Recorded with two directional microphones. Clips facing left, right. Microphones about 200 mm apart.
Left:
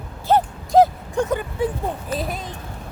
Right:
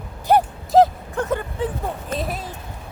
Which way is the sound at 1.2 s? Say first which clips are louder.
Left 3 dB; 15° left (ahead or behind).